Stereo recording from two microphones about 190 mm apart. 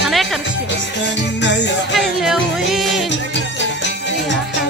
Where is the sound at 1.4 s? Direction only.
70° left (ahead or behind).